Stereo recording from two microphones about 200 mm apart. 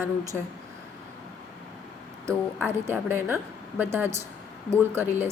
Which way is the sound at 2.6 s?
10° right (ahead or behind).